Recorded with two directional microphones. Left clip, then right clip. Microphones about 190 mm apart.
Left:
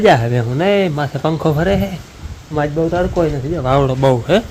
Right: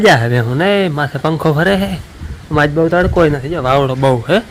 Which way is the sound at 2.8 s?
35° right (ahead or behind).